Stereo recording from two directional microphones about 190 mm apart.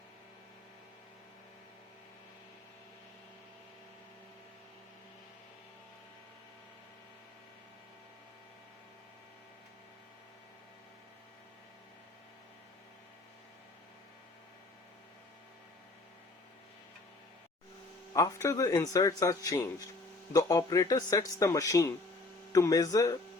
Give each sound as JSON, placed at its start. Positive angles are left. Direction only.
{"t": 18.1, "sound": "speech", "side_deg": 15}